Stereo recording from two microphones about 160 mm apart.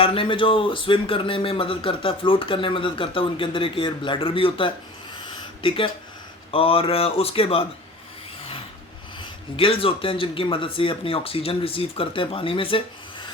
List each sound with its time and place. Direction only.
0.0 s speech: 35° left (ahead or behind)
9.6 s speech: 35° left (ahead or behind)